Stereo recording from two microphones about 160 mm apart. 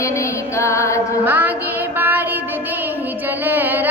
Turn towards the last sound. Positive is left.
turn(degrees=-10)  # may be behind; listen again after turning